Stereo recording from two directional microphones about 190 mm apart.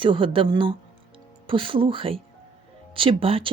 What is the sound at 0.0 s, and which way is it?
Speech, 25° right (ahead or behind).